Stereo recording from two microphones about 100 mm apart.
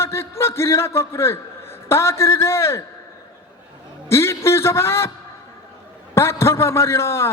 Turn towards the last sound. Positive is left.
turn(degrees=25)  # may be behind; listen again after turning